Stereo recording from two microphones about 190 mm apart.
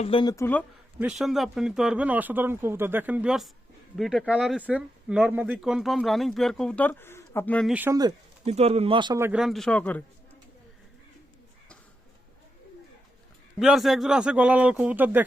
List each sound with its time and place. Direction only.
0.0 s speech: 25° left (ahead or behind)
0.9 s speech: 5° right (ahead or behind)
7.7 s speech: 10° right (ahead or behind)
8.4 s speech: 35° right (ahead or behind)
9.2 s speech: 5° right (ahead or behind)
13.6 s speech: centre (ahead or behind)